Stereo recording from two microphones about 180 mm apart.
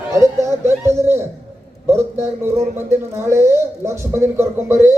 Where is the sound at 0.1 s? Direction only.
15° right (ahead or behind).